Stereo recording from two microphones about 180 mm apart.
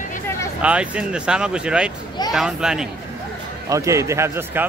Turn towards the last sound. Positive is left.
turn(degrees=-10)  # may be behind; listen again after turning